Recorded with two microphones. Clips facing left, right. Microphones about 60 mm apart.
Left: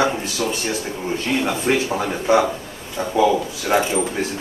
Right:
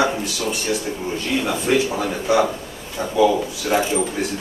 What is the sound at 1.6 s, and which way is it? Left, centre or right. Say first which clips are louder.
A man's voice: right 2 dB; centre.